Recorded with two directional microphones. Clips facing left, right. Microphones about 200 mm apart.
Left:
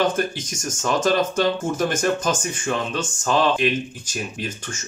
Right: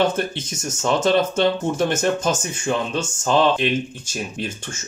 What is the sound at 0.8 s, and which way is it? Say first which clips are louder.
Speech: right 2 dB; 25° right (ahead or behind).